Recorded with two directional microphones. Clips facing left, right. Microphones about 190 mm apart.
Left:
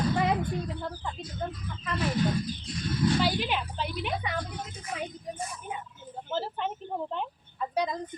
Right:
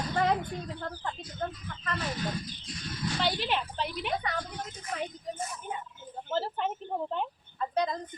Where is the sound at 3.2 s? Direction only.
Centre (ahead or behind).